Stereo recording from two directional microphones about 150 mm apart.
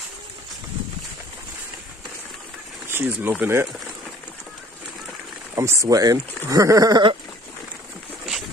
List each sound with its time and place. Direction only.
2.9 s speech: 15° right (ahead or behind)
5.5 s speech: 20° right (ahead or behind)